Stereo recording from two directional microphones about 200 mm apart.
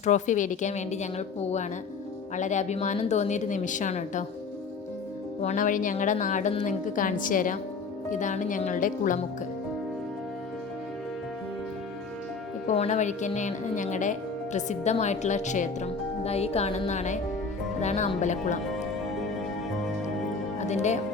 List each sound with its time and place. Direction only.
0.0 s speech: 35° left (ahead or behind)
5.4 s speech: 35° left (ahead or behind)
12.6 s speech: 35° left (ahead or behind)
20.6 s speech: 35° left (ahead or behind)